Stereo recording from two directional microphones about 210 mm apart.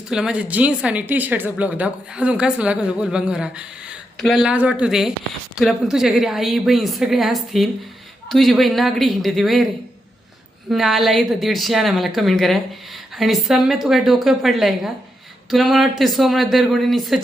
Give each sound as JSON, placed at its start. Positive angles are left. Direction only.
{"t": 0.1, "sound": "speech", "side_deg": -5}
{"t": 10.7, "sound": "speech", "side_deg": 0}